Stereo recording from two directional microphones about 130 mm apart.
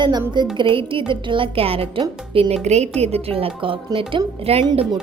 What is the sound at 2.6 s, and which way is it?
A woman's voice, 60° right (ahead or behind).